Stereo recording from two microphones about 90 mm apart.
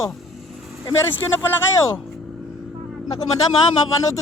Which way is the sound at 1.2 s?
20° left (ahead or behind).